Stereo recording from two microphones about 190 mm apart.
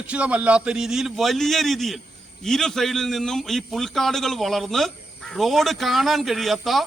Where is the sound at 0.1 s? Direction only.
5° right (ahead or behind).